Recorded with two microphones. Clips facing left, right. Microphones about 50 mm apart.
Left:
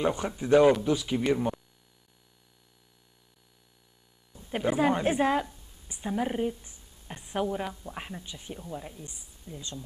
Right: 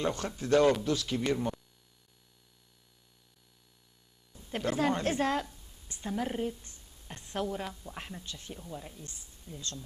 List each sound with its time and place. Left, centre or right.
0.0 s a man's voice: centre
4.3 s a woman's voice: centre